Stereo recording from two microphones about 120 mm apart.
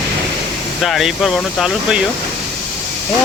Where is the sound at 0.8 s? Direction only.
Centre (ahead or behind).